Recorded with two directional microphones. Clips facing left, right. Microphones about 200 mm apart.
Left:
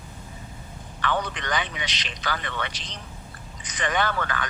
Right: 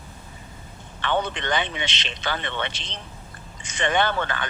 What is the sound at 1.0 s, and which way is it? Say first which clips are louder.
A man's voice: right 2 dB; 25° right (ahead or behind).